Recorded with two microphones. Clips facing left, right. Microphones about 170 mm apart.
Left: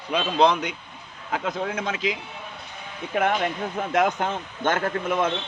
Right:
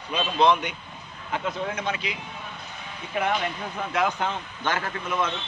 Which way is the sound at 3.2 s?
50° left (ahead or behind).